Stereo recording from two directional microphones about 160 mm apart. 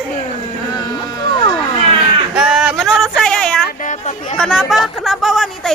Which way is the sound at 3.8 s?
50° left (ahead or behind).